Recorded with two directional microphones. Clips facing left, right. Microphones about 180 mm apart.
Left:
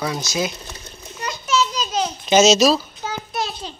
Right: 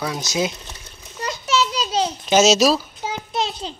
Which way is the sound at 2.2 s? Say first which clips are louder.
Left 2 dB; 10° right (ahead or behind).